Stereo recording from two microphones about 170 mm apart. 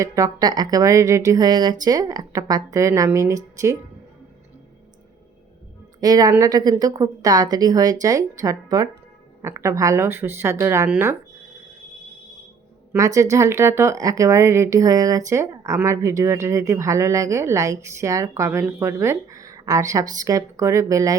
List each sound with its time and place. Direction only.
0.0 s speech: 20° right (ahead or behind)
6.0 s speech: 20° right (ahead or behind)
12.9 s speech: 20° right (ahead or behind)